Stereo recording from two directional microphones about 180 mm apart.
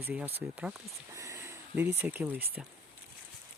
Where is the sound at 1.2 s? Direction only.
15° right (ahead or behind).